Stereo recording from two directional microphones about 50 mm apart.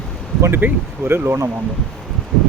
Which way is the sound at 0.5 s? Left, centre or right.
Right.